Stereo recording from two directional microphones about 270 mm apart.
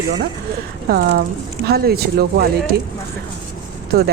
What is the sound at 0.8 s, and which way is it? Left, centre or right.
Speech, right.